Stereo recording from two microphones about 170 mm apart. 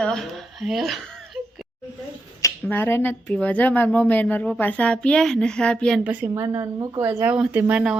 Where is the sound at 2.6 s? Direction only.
10° left (ahead or behind).